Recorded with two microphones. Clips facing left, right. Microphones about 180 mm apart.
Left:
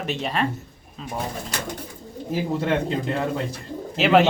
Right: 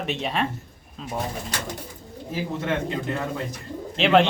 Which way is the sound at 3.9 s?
5° left (ahead or behind).